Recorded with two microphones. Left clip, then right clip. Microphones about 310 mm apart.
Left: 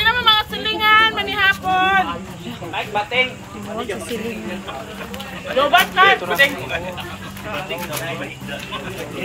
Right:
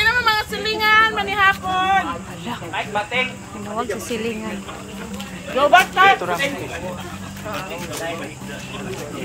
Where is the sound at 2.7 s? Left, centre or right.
Left.